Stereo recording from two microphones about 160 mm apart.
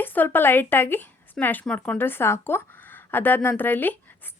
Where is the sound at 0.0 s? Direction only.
10° left (ahead or behind).